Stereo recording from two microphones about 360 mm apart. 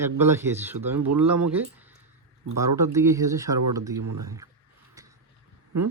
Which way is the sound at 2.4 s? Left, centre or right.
Right.